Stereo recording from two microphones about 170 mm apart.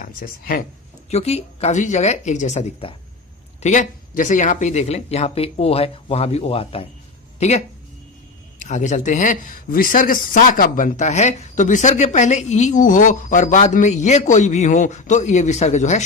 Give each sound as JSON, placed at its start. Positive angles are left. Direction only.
{"t": 0.0, "sound": "speech", "side_deg": 55}
{"t": 1.1, "sound": "speech", "side_deg": 40}